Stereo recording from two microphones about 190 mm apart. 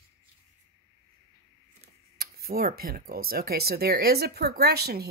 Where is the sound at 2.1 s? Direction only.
55° right (ahead or behind).